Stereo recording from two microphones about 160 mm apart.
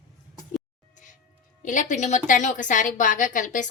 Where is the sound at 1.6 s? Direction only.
50° left (ahead or behind).